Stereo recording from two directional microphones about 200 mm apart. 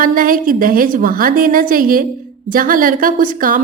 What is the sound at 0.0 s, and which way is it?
A woman's voice, 45° right (ahead or behind).